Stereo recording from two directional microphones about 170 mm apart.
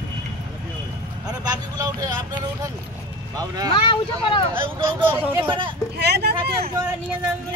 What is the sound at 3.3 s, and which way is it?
Speech, 20° right (ahead or behind).